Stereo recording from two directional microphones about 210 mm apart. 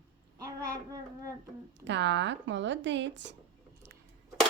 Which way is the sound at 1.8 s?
60° right (ahead or behind).